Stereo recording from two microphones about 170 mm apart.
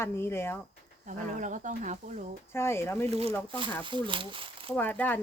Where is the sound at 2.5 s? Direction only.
15° left (ahead or behind).